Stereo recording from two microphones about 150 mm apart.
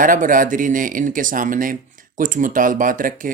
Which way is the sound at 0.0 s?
65° right (ahead or behind).